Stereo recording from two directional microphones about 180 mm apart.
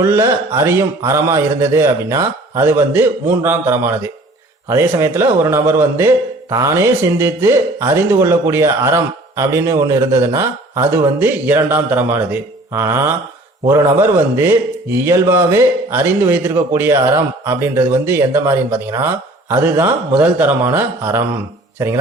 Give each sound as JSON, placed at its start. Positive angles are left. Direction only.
{"t": 0.0, "sound": "speech", "side_deg": -15}